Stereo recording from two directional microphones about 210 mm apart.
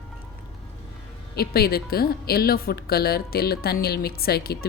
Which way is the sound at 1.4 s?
45° left (ahead or behind).